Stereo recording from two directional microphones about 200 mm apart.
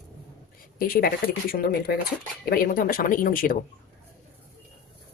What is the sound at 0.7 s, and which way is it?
Speech, 45° left (ahead or behind).